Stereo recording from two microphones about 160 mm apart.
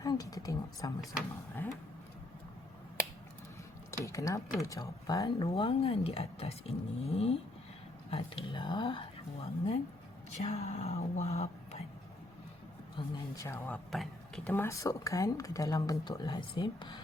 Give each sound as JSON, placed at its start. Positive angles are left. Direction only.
{"t": 0.0, "sound": "a woman's voice", "side_deg": 25}
{"t": 4.0, "sound": "speech", "side_deg": 20}
{"t": 5.5, "sound": "speech", "side_deg": 35}
{"t": 13.0, "sound": "speech", "side_deg": 20}
{"t": 13.7, "sound": "speech", "side_deg": 0}
{"t": 14.5, "sound": "speech", "side_deg": 15}